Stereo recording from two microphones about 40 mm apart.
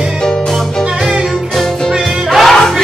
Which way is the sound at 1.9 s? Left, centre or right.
Centre.